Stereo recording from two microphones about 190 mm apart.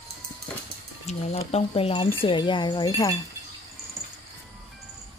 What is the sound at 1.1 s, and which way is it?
Speech, 35° left (ahead or behind).